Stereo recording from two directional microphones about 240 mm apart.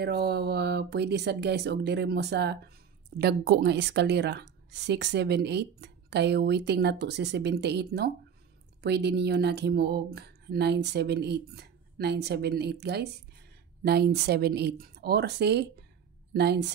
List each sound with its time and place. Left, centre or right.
0.0 s a woman's voice: right